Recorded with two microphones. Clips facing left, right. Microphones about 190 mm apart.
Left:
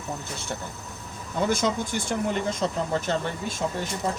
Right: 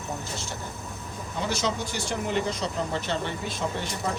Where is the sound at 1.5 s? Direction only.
50° left (ahead or behind).